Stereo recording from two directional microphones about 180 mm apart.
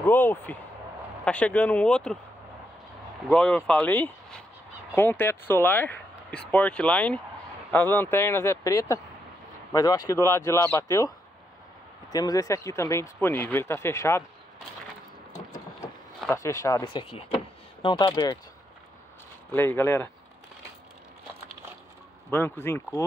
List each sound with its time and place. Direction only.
0.0 s speech: 10° left (ahead or behind)
3.3 s speech: 5° left (ahead or behind)
16.4 s speech: 15° left (ahead or behind)
19.5 s speech: 10° left (ahead or behind)
22.3 s speech: 10° left (ahead or behind)